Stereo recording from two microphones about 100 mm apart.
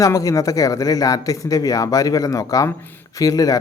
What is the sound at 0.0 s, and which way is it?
Speech, 35° left (ahead or behind).